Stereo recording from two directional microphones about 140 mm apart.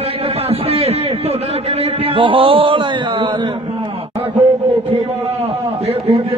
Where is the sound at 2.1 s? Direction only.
40° right (ahead or behind).